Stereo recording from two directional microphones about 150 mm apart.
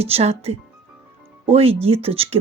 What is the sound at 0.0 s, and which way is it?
A woman's voice, 45° right (ahead or behind).